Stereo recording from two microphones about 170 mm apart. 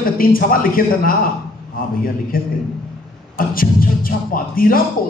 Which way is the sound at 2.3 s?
60° left (ahead or behind).